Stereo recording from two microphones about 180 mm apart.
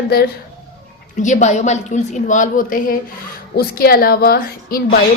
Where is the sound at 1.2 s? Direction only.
45° left (ahead or behind).